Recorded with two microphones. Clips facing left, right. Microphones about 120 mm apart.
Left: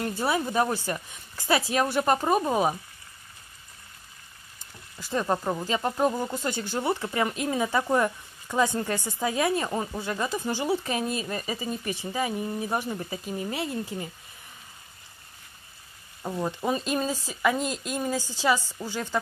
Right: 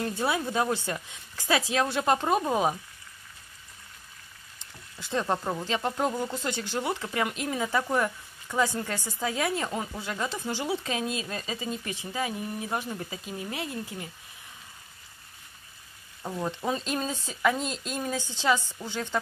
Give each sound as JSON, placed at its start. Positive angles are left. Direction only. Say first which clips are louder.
{"t": 0.0, "sound": "speech", "louder": "left 1 dB", "side_deg": 5}
{"t": 4.9, "sound": "speech", "louder": "left 2 dB", "side_deg": 10}
{"t": 13.4, "sound": "speech", "louder": "left 3 dB", "side_deg": 0}
{"t": 16.2, "sound": "speech", "louder": "left 2 dB", "side_deg": 5}